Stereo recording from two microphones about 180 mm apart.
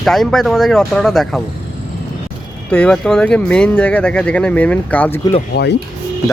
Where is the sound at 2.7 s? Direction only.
5° left (ahead or behind).